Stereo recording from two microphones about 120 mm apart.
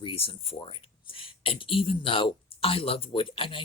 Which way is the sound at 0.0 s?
50° left (ahead or behind).